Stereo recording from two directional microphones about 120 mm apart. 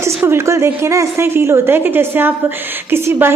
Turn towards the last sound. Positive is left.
turn(degrees=-20)  # may be behind; listen again after turning